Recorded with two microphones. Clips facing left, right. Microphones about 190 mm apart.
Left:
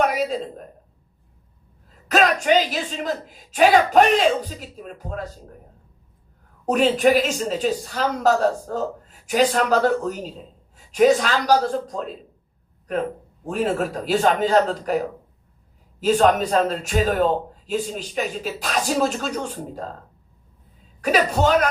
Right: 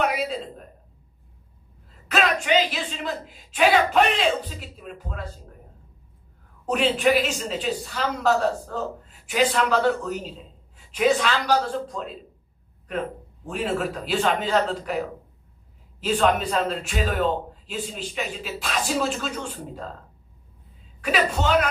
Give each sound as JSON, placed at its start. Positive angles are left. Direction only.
{"t": 0.0, "sound": "a sound", "side_deg": 40}
{"t": 2.0, "sound": "a man's voice", "side_deg": 40}
{"t": 6.7, "sound": "a man's voice", "side_deg": 40}
{"t": 13.4, "sound": "a man's voice", "side_deg": 40}
{"t": 16.0, "sound": "a man's voice", "side_deg": 40}
{"t": 21.0, "sound": "a man's voice", "side_deg": 40}